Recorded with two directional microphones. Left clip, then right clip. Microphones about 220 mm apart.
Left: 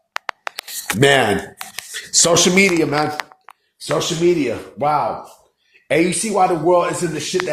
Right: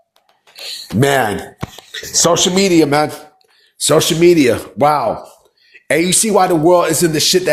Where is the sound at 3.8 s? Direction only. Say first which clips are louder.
Right 7 dB; 55° right (ahead or behind).